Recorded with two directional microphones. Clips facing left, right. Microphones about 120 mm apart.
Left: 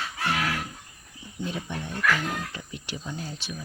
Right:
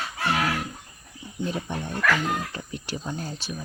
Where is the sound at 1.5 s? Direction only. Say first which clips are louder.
Right 3 dB; 45° right (ahead or behind).